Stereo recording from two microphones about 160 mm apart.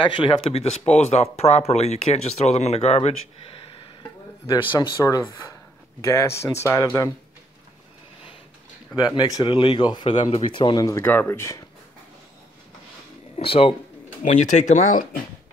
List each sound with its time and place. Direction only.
0.0 s speech: 35° left (ahead or behind)
4.6 s speech: 25° left (ahead or behind)
8.9 s speech: 25° left (ahead or behind)
10.1 s speech: 45° left (ahead or behind)
10.4 s speech: 30° left (ahead or behind)
13.4 s speech: 35° left (ahead or behind)
14.2 s speech: 50° left (ahead or behind)